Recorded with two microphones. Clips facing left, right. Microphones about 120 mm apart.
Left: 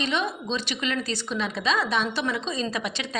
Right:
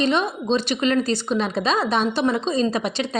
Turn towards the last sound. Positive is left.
turn(degrees=-30)  # may be behind; listen again after turning